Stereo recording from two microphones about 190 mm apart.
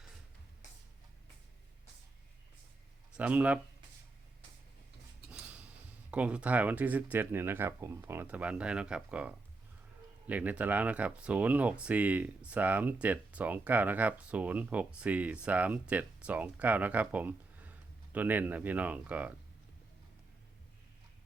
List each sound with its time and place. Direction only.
3.2 s speech: 5° right (ahead or behind)
5.3 s a sound: 5° right (ahead or behind)
6.1 s speech: 5° right (ahead or behind)